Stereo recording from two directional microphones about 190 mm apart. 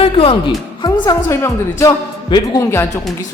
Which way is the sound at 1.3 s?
15° left (ahead or behind).